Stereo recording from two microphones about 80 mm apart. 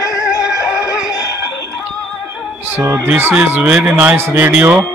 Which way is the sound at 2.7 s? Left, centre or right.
Right.